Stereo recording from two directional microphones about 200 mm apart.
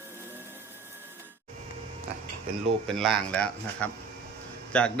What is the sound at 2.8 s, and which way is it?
A man's voice, centre (ahead or behind).